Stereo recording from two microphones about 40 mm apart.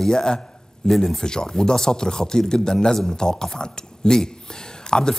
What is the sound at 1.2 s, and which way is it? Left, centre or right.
A man's voice, centre.